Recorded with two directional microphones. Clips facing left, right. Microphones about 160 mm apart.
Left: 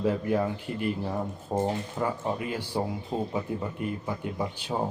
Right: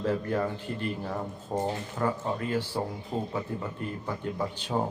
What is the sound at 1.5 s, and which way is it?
A man's voice, 20° left (ahead or behind).